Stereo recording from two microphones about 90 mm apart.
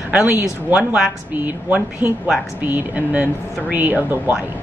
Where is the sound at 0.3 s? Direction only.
20° right (ahead or behind).